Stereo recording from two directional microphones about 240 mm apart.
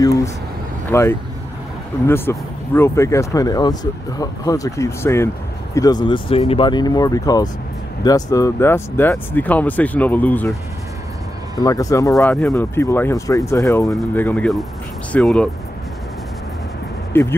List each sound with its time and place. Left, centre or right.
0.0 s vehicle: centre
0.8 s speech: centre
17.1 s speech: centre